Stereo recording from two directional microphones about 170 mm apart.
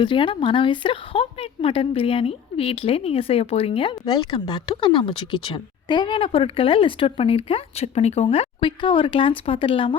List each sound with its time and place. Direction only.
0.0 s speech: 30° left (ahead or behind)